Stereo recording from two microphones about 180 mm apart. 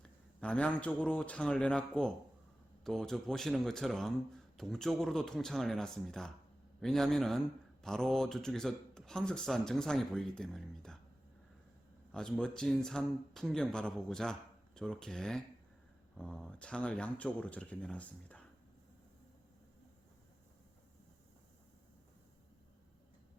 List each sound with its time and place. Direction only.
0.0 s a man's voice: 5° left (ahead or behind)
12.1 s a man's voice: 5° left (ahead or behind)